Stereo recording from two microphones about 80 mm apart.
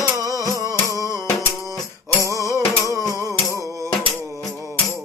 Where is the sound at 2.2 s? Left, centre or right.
Right.